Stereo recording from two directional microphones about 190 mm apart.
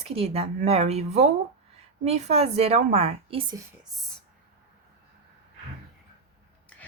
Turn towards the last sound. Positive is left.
turn(degrees=5)  # may be behind; listen again after turning